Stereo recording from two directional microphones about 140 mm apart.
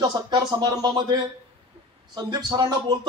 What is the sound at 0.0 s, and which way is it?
A man's voice, 30° right (ahead or behind).